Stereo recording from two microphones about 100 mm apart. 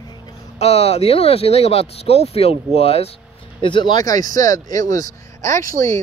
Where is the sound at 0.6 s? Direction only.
90° left.